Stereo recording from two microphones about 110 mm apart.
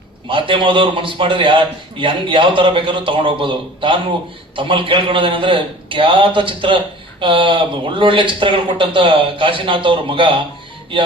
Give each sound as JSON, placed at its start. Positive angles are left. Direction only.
{"t": 0.3, "sound": "a man's voice", "side_deg": -50}